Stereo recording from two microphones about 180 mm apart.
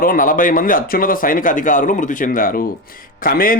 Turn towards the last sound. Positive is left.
turn(degrees=50)  # may be behind; listen again after turning